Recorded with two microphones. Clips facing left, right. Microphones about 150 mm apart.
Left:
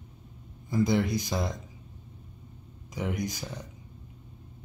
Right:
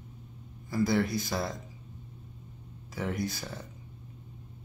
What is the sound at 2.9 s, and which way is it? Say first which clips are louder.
Speech: left 1 dB; 15° left (ahead or behind).